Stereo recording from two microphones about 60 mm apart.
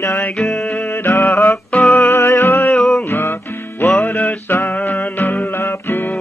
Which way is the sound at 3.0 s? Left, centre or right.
Left.